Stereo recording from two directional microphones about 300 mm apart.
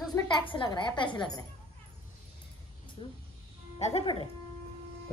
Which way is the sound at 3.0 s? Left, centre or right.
Centre.